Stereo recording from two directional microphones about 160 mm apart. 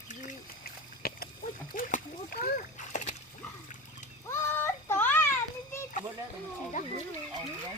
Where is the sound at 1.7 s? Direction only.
60° left (ahead or behind).